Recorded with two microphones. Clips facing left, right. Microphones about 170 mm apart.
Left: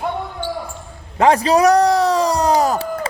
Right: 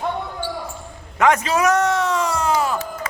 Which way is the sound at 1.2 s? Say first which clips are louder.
Left 4 dB; 35° left (ahead or behind).